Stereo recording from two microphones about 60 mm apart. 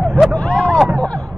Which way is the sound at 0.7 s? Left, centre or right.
Centre.